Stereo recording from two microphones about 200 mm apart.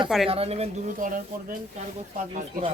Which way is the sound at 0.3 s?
30° right (ahead or behind).